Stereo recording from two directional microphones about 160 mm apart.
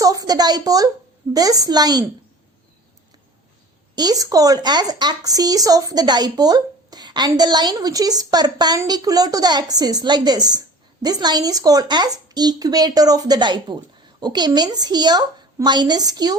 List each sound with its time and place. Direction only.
0.0 s speech: 20° right (ahead or behind)
3.9 s speech: 25° right (ahead or behind)